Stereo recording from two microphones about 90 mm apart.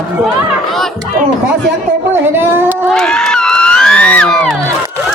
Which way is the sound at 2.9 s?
5° left (ahead or behind).